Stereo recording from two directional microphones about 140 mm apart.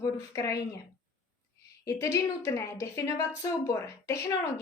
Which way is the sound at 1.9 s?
20° left (ahead or behind).